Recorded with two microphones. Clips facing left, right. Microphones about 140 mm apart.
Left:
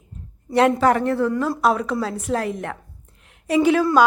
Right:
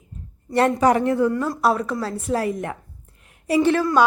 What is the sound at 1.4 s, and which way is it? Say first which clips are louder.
A woman's voice: left 1 dB; centre (ahead or behind).